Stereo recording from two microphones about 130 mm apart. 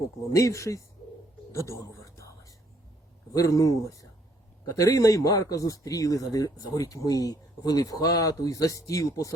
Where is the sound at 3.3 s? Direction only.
25° left (ahead or behind).